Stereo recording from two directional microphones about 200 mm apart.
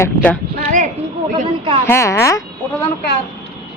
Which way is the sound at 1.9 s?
10° left (ahead or behind).